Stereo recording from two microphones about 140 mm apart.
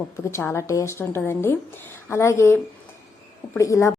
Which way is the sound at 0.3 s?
20° left (ahead or behind).